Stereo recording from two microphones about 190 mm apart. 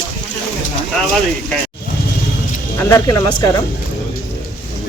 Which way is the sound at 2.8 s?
15° left (ahead or behind).